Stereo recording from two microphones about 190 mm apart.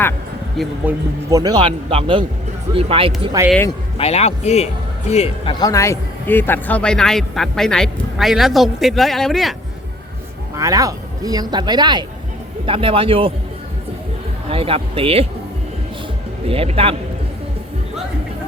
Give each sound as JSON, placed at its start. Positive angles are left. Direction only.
{"t": 0.5, "sound": "a man's voice", "side_deg": 0}
{"t": 1.3, "sound": "speech", "side_deg": -20}
{"t": 3.4, "sound": "speech", "side_deg": -15}
{"t": 3.9, "sound": "a man's voice", "side_deg": 35}
{"t": 10.5, "sound": "speech", "side_deg": -15}
{"t": 14.5, "sound": "speech", "side_deg": -30}
{"t": 16.5, "sound": "speech", "side_deg": -30}